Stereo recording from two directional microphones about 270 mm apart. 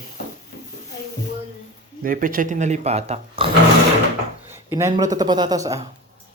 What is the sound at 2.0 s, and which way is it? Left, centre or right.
Speech, right.